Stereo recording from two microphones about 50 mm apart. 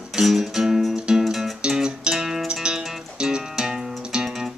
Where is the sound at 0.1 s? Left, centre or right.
Centre.